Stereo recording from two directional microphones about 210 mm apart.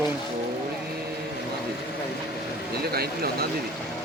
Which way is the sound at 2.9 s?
45° right (ahead or behind).